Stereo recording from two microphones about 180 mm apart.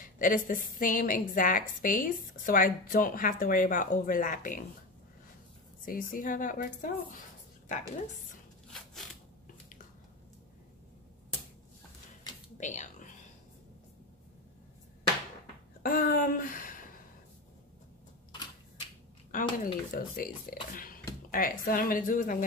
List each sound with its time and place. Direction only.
0.0 s a woman's voice: 50° left (ahead or behind)
5.9 s speech: 50° left (ahead or behind)
12.5 s whispering: 40° left (ahead or behind)
15.8 s speech: 50° left (ahead or behind)
19.6 s a woman's voice: 50° left (ahead or behind)
20.7 s a sound: 50° left (ahead or behind)
21.3 s a woman's voice: 50° left (ahead or behind)